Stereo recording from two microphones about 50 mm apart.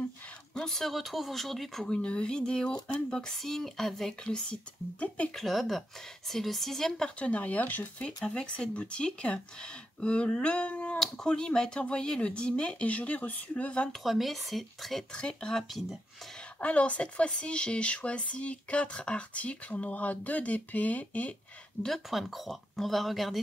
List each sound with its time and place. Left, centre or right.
0.6 s a woman's voice: centre
1.9 s speech: left; by 4.1 s centre
4.2 s speech: left
5.3 s a woman's voice: centre
7.2 s speech: left
8.3 s speech: centre
11.0 s speech: centre
13.9 s a woman's voice: centre
15.1 s speech: centre
16.5 s speech: left
21.8 s speech: left
22.1 s a woman's voice: centre